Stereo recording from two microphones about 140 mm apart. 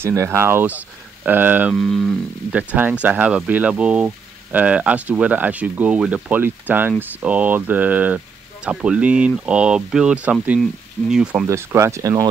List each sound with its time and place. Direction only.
0.0 s speech: 20° right (ahead or behind)
1.8 s speech: centre (ahead or behind)
2.5 s speech: 10° right (ahead or behind)
11.4 s speech: 20° right (ahead or behind)